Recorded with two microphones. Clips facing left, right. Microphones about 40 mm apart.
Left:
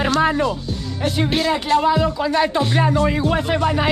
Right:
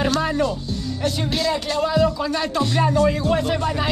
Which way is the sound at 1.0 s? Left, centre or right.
Left.